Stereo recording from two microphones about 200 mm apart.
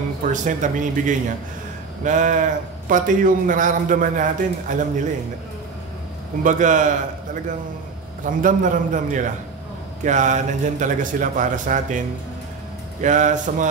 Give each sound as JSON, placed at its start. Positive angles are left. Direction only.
{"t": 0.2, "sound": "a man's voice", "side_deg": -40}
{"t": 6.4, "sound": "a man's voice", "side_deg": -40}
{"t": 8.3, "sound": "a man's voice", "side_deg": -40}
{"t": 13.0, "sound": "a man's voice", "side_deg": -40}